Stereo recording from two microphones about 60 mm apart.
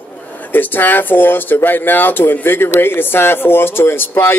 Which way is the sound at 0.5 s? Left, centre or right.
Left.